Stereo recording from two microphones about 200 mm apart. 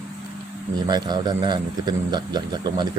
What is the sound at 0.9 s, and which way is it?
Speech, 20° right (ahead or behind).